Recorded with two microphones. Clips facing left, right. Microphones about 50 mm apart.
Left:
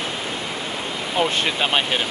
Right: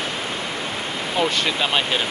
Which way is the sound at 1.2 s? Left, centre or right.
Centre.